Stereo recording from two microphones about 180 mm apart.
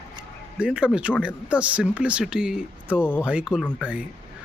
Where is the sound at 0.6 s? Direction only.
5° right (ahead or behind).